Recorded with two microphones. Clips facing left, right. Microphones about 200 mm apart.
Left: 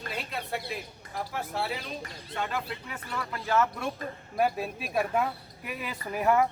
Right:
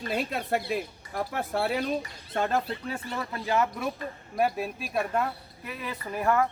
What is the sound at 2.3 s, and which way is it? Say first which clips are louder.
Speech: right 6 dB; 45° right (ahead or behind).